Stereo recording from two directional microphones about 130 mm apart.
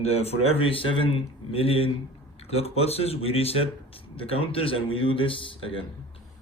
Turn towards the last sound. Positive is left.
turn(degrees=40)  # may be behind; listen again after turning